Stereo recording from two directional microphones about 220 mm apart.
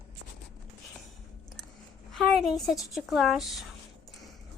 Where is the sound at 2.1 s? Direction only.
Centre (ahead or behind).